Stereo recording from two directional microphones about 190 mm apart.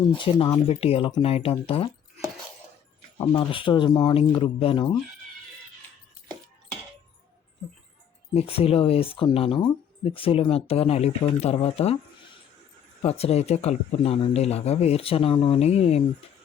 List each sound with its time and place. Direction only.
0.2 s speech: 25° left (ahead or behind)
8.3 s speech: 30° left (ahead or behind)
13.0 s speech: 30° left (ahead or behind)